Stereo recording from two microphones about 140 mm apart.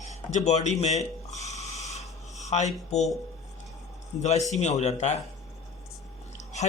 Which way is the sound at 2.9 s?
50° left (ahead or behind).